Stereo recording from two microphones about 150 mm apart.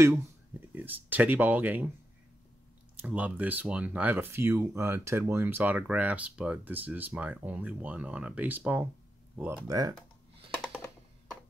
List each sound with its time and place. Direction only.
0.7 s speech: 10° right (ahead or behind)
3.0 s speech: 10° right (ahead or behind)
9.7 s speech: 25° right (ahead or behind)